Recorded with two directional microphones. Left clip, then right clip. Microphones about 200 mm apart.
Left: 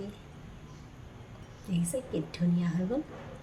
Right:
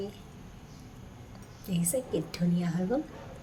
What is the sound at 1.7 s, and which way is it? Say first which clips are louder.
A woman's voice: right 3 dB; 15° right (ahead or behind).